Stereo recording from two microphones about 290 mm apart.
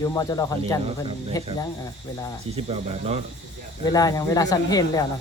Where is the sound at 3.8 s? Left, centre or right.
Centre.